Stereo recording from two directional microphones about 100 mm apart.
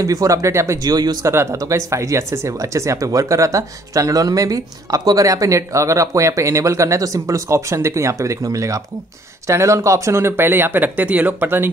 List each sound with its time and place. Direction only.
0.0 s speech: 35° right (ahead or behind)
1.3 s speech: 25° right (ahead or behind)